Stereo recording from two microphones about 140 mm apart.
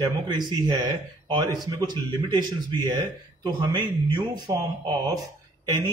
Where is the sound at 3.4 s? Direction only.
35° right (ahead or behind).